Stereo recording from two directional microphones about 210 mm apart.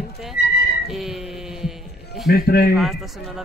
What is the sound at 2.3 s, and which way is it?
Speech, 50° left (ahead or behind).